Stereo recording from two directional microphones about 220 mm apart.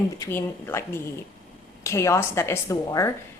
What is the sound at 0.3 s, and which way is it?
A woman's voice, 10° left (ahead or behind).